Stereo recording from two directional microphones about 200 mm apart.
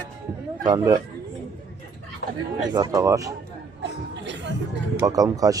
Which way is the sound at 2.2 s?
50° left (ahead or behind).